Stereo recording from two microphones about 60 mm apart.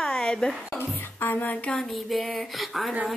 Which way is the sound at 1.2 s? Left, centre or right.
Left.